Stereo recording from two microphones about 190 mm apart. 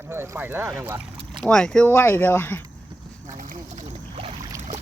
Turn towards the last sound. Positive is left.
turn(degrees=-45)  # may be behind; listen again after turning